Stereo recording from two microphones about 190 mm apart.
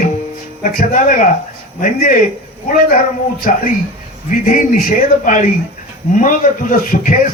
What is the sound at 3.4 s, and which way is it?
A man's voice, 45° left (ahead or behind).